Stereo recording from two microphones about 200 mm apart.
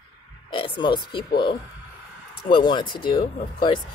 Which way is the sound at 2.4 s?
25° left (ahead or behind).